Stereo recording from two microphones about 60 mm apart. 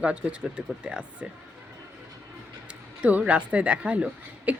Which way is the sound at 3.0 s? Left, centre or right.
Right.